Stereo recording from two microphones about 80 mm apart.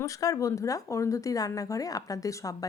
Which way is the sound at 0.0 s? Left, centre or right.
Left.